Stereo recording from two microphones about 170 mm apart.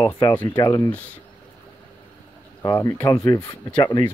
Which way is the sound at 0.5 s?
25° left (ahead or behind).